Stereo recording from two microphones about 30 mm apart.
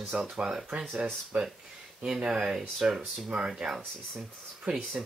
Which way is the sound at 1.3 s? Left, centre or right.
Right.